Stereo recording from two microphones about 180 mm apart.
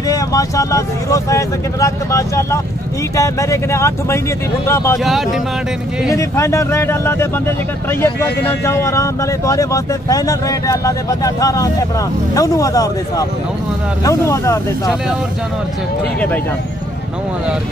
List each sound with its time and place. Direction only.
0.1 s speech: 20° left (ahead or behind)
4.9 s speech: centre (ahead or behind)
6.1 s speech: 15° left (ahead or behind)